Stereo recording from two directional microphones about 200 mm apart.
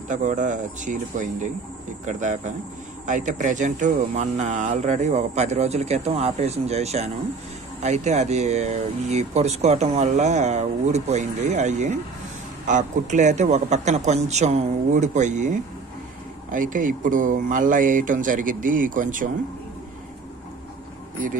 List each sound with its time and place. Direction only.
0.1 s speech: 40° right (ahead or behind)
16.5 s speech: 40° right (ahead or behind)